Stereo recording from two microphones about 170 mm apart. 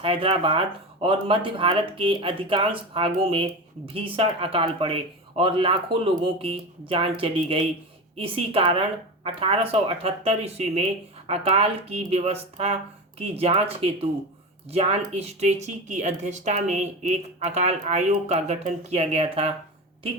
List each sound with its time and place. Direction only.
0.0 s a woman's voice: 30° right (ahead or behind)